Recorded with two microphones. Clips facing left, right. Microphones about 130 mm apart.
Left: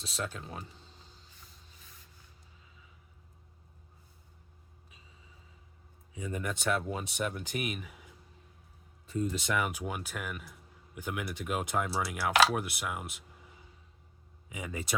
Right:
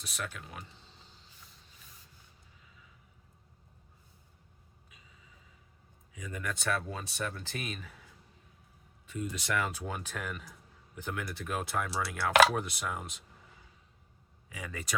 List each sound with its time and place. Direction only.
0.0 s speech: 25° left (ahead or behind)
6.1 s speech: 25° left (ahead or behind)
9.3 s speech: 25° left (ahead or behind)
12.5 s speech: 10° left (ahead or behind)
14.5 s speech: 20° left (ahead or behind)